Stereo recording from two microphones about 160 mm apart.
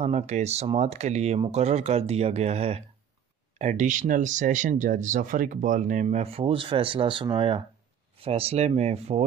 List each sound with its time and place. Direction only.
0.0 s speech: 45° right (ahead or behind)